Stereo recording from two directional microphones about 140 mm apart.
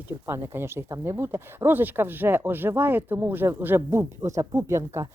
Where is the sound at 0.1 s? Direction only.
20° right (ahead or behind).